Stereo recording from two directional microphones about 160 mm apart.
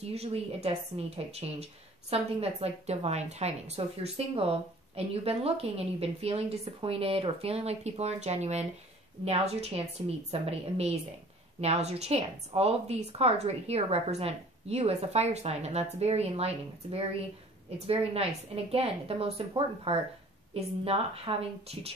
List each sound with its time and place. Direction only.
0.0 s a woman's voice: 40° right (ahead or behind)